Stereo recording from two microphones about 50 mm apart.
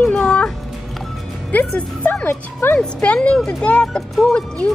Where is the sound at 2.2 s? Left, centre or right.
Left.